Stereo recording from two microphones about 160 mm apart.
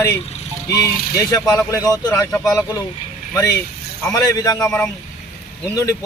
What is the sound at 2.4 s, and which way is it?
Speech, centre (ahead or behind).